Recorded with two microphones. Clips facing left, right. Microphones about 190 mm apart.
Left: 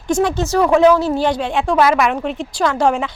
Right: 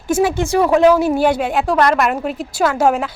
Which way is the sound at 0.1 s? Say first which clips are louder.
Right 1 dB; 5° right (ahead or behind).